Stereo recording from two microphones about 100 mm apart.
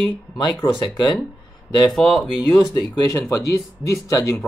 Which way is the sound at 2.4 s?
40° left (ahead or behind).